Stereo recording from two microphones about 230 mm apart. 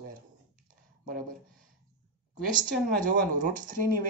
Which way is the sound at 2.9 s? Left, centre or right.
Right.